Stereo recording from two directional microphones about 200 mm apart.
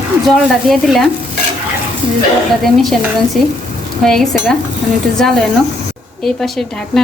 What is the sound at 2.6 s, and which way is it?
Speech, centre (ahead or behind).